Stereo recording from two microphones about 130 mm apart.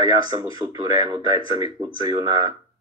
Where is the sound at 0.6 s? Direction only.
30° right (ahead or behind).